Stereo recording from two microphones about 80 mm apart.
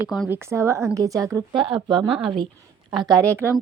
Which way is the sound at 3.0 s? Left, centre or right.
Right.